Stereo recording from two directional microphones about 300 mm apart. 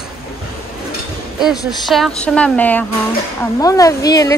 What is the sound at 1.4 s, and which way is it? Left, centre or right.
A woman's voice, centre.